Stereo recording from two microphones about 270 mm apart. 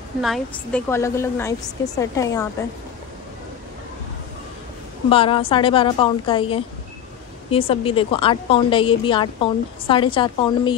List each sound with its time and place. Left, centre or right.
0.2 s a woman's voice: centre
5.1 s a woman's voice: centre